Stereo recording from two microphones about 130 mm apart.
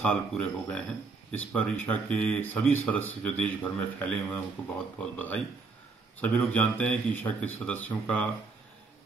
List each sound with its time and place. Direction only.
0.0 s speech: 5° left (ahead or behind)